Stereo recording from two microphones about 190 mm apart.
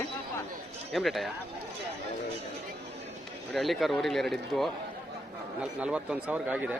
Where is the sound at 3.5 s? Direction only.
Centre (ahead or behind).